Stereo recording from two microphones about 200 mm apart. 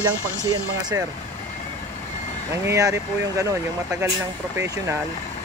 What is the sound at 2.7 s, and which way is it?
Speech, 15° right (ahead or behind).